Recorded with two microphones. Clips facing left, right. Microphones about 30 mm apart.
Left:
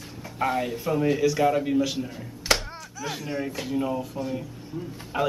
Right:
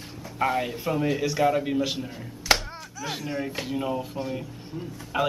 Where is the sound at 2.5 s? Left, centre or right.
Centre.